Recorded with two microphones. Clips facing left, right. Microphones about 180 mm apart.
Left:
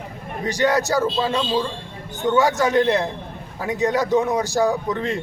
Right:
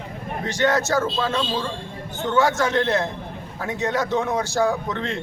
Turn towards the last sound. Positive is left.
turn(degrees=15)  # may be behind; listen again after turning